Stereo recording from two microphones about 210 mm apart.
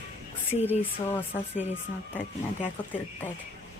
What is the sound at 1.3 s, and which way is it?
Speech, 15° left (ahead or behind).